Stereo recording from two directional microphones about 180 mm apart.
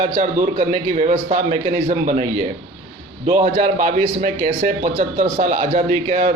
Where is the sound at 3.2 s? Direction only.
45° right (ahead or behind).